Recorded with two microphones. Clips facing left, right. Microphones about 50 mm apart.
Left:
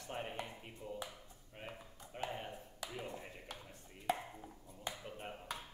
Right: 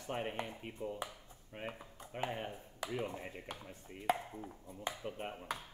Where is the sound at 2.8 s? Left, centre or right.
Right.